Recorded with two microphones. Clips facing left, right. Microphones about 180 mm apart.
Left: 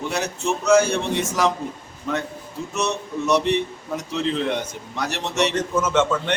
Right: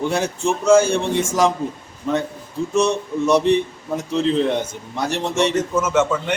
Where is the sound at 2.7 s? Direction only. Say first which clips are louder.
Right 6 dB; 30° right (ahead or behind).